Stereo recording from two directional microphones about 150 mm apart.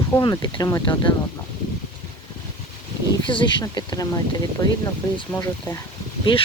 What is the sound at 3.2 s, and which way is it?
Speech, 30° left (ahead or behind).